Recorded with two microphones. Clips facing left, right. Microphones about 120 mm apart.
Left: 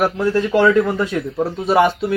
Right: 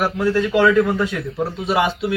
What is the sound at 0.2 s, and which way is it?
Speech, 30° left (ahead or behind).